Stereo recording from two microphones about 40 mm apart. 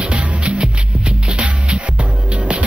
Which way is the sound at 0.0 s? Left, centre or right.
Right.